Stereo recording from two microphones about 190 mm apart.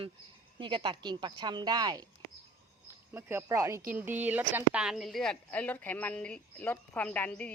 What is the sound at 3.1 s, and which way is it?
A woman's voice, 10° right (ahead or behind).